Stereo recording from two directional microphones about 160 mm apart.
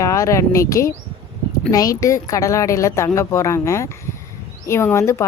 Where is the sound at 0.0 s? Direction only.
20° left (ahead or behind).